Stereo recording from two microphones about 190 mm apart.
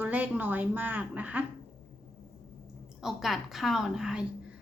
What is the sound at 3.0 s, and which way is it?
Speech, centre (ahead or behind).